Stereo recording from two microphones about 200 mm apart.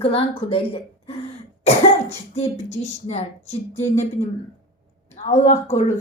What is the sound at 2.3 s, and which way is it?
Speech, 35° left (ahead or behind).